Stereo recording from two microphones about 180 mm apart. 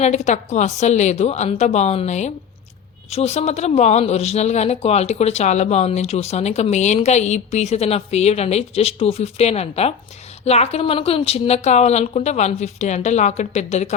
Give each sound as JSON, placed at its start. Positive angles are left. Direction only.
{"t": 0.0, "sound": "speech", "side_deg": 40}